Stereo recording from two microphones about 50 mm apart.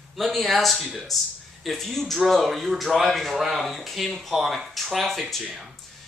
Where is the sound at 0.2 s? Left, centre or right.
Centre.